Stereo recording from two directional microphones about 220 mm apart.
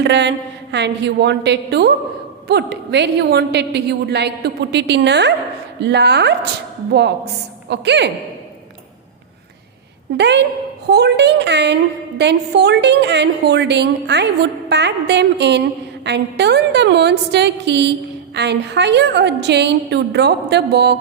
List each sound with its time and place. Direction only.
0.0 s a woman's voice: 50° right (ahead or behind)
7.7 s a woman's voice: 50° right (ahead or behind)
10.2 s a woman's voice: 50° right (ahead or behind)